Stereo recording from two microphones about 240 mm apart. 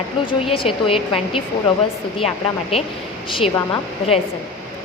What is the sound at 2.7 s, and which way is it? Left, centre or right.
A woman's voice, left.